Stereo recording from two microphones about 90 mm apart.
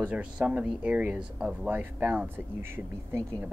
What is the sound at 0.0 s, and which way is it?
Speech, 15° right (ahead or behind).